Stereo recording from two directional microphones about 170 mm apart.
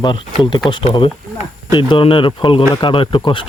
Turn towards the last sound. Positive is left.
turn(degrees=30)  # may be behind; listen again after turning